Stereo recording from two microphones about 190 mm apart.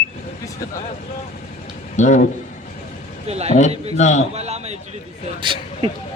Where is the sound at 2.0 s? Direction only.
40° left (ahead or behind).